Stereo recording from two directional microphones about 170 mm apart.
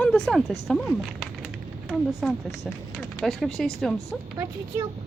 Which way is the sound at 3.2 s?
Centre (ahead or behind).